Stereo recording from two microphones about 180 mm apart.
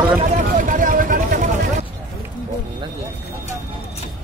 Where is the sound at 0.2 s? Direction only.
45° right (ahead or behind).